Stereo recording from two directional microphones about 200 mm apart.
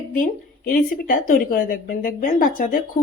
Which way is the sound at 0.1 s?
45° left (ahead or behind).